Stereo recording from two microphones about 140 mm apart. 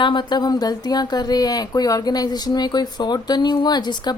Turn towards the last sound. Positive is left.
turn(degrees=30)  # may be behind; listen again after turning